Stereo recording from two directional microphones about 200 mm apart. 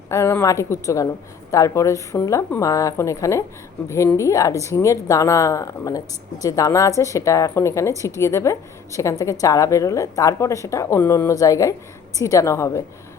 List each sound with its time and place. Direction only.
0.1 s a woman's voice: 15° left (ahead or behind)